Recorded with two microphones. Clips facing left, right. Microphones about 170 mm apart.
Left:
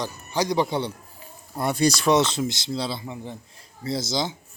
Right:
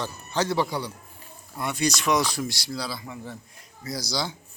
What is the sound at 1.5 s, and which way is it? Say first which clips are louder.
A man's voice: left 5 dB; 35° left (ahead or behind).